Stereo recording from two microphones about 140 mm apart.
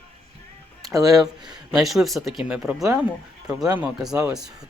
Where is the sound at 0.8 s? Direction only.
25° right (ahead or behind).